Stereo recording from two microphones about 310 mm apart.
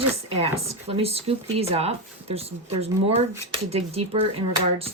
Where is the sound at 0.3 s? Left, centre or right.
Centre.